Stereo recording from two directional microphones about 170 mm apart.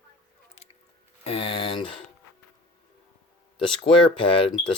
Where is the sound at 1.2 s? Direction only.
35° left (ahead or behind).